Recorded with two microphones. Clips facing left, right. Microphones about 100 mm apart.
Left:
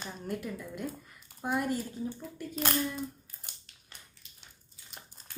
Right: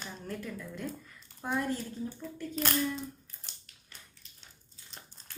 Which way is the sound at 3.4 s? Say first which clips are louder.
Left 2 dB; 15° left (ahead or behind).